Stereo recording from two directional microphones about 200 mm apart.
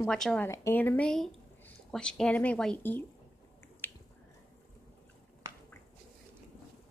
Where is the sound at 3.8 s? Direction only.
10° left (ahead or behind).